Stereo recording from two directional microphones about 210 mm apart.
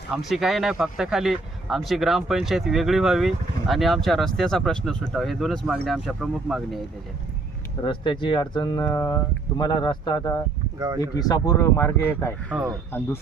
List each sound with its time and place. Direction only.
0.1 s speech: centre (ahead or behind)
7.9 s speech: 25° left (ahead or behind)
10.8 s speech: 15° right (ahead or behind)
11.0 s speech: 15° left (ahead or behind)